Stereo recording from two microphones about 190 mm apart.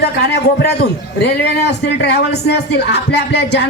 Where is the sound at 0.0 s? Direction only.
60° left (ahead or behind).